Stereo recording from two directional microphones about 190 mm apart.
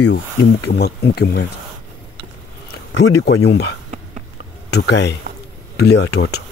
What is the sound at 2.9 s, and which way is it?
Speech, 65° left (ahead or behind).